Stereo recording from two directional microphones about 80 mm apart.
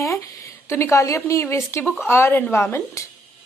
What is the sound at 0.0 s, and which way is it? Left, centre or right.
A woman's voice, left.